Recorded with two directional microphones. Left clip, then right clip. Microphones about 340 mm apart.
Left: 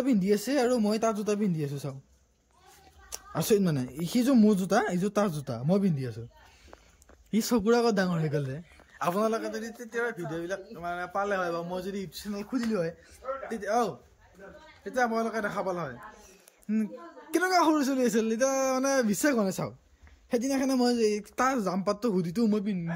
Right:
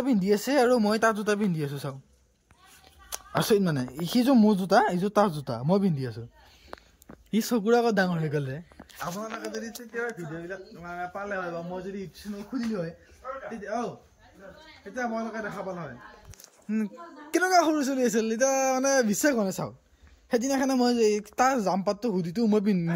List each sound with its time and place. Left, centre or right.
0.0 s speech: centre
3.1 s speech: centre
7.2 s speech: centre
15.0 s speech: centre
16.6 s speech: centre